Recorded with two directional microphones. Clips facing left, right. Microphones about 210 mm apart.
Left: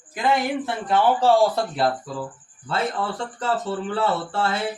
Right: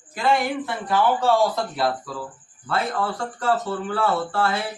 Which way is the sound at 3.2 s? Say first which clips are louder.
Right 2 dB; 25° left (ahead or behind).